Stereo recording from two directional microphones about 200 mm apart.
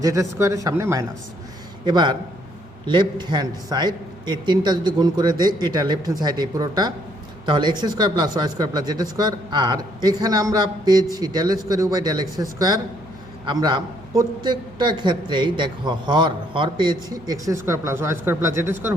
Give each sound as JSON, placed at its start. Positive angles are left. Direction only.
{"t": 0.0, "sound": "speech", "side_deg": -15}